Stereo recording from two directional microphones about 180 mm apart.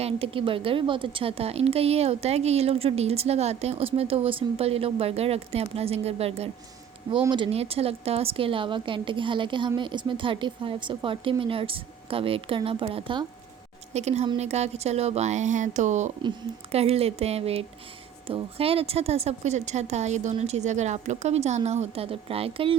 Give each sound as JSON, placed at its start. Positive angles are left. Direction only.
{"t": 0.0, "sound": "a woman's voice", "side_deg": -30}